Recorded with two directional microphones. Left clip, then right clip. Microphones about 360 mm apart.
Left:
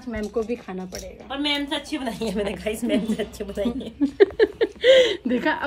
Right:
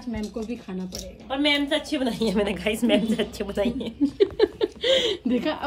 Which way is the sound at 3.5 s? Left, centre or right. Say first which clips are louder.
Right 1 dB; right.